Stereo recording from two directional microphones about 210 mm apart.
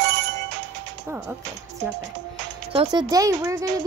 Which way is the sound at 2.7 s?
20° right (ahead or behind).